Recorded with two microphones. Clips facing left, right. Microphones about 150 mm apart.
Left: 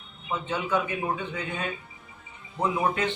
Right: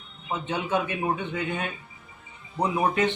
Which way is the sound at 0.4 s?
20° right (ahead or behind).